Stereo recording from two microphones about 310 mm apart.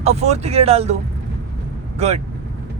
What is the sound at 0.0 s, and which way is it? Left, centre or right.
Speech, right.